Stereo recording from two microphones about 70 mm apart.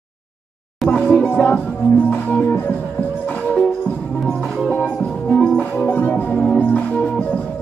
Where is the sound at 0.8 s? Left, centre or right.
Centre.